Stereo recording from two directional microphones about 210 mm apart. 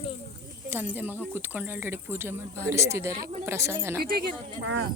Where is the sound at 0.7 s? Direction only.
10° right (ahead or behind).